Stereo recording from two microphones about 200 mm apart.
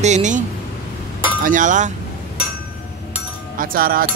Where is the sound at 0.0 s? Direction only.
35° right (ahead or behind).